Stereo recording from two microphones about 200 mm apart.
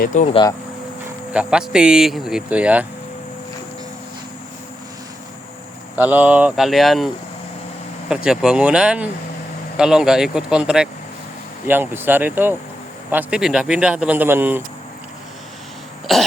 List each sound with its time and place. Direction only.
0.0 s speech: 40° left (ahead or behind)
1.3 s speech: 5° right (ahead or behind)
6.0 s speech: 10° right (ahead or behind)
8.1 s speech: 5° right (ahead or behind)
16.1 s speech: centre (ahead or behind)